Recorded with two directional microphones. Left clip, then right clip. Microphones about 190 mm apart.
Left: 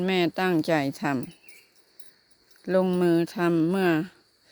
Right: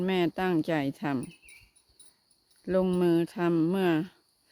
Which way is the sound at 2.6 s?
10° right (ahead or behind).